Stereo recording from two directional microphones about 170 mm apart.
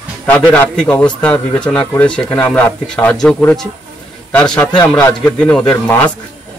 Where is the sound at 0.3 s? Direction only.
10° left (ahead or behind).